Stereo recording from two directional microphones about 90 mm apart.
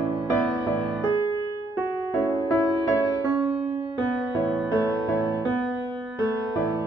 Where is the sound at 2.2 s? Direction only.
45° left (ahead or behind).